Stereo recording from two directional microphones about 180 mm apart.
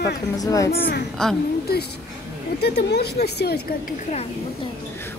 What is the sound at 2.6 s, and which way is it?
A woman's voice, 65° left (ahead or behind).